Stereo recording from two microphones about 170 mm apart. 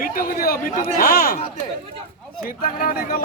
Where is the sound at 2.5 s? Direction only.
55° left (ahead or behind).